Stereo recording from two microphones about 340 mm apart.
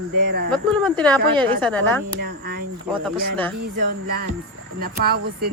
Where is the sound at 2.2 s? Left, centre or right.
Right.